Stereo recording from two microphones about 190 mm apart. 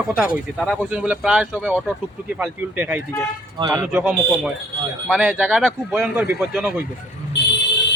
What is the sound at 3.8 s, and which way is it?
Speech, 5° right (ahead or behind).